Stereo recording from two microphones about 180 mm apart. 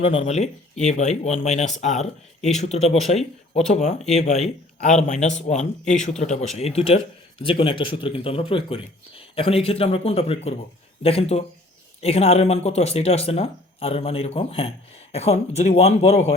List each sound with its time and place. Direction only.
0.0 s speech: 35° left (ahead or behind)